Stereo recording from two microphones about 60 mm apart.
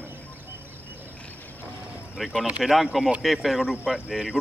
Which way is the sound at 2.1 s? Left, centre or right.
Centre.